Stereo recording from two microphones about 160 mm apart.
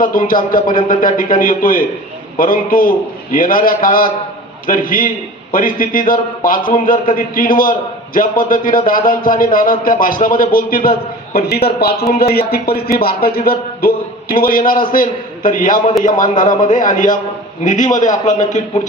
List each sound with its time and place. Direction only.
0.0 s a man's voice: 60° left (ahead or behind)
11.3 s a man's voice: 75° left (ahead or behind); by 18.8 s 50° left (ahead or behind)